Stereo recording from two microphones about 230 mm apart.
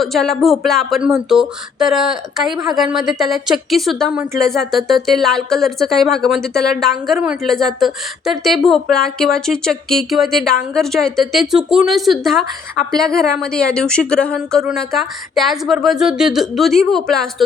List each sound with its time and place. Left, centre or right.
0.0 s speech: centre